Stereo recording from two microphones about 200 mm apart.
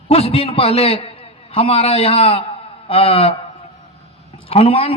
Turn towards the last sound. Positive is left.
turn(degrees=30)  # may be behind; listen again after turning